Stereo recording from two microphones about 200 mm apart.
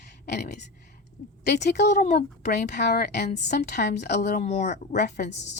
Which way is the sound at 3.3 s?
40° left (ahead or behind).